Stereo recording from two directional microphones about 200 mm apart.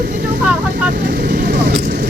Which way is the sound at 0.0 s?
50° right (ahead or behind).